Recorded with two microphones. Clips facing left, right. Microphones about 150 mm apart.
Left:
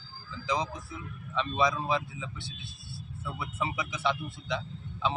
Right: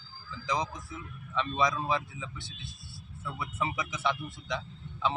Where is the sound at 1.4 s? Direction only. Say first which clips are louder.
Left 1 dB; 25° left (ahead or behind).